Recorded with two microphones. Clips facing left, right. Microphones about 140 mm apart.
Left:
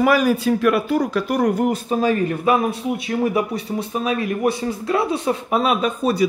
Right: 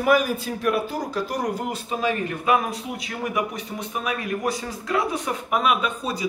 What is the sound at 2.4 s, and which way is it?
A man's voice, 30° left (ahead or behind).